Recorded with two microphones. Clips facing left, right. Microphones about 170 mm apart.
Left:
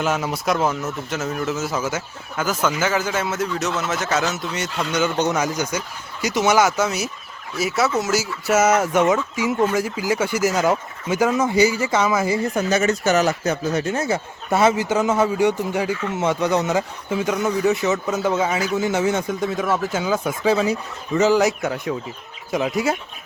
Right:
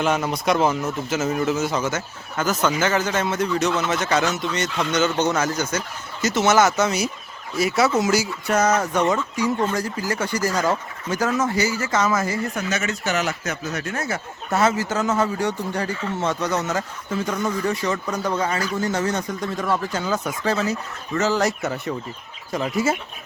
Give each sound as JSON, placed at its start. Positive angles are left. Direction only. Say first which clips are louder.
{"t": 0.0, "sound": "speech", "louder": "right 1 dB", "side_deg": 5}
{"t": 12.5, "sound": "speech", "louder": "left 6 dB", "side_deg": 35}
{"t": 21.4, "sound": "speech", "louder": "left 2 dB", "side_deg": 0}